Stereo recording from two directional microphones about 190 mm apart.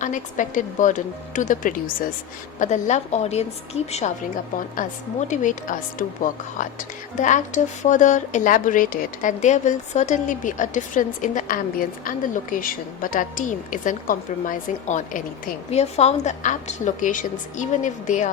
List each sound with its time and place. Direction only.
0.0 s a woman's voice: 40° left (ahead or behind)
4.8 s a woman's voice: 40° left (ahead or behind)